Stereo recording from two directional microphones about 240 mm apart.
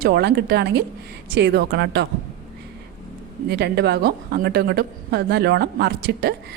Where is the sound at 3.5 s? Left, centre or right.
Right.